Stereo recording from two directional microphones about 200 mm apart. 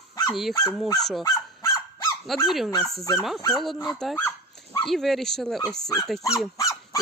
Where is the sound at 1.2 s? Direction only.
15° left (ahead or behind).